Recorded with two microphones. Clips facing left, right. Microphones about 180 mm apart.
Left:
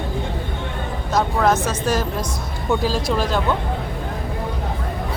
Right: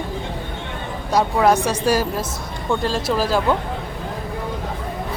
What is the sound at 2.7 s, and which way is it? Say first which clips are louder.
Speech: even; 5° left (ahead or behind).